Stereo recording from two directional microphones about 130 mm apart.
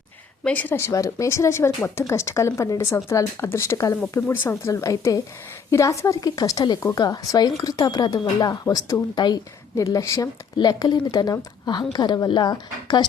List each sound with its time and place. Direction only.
0.4 s speech: 10° left (ahead or behind); by 13.1 s 35° left (ahead or behind)